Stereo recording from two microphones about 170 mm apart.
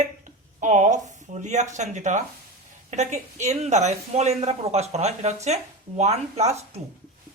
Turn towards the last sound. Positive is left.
turn(degrees=-40)  # may be behind; listen again after turning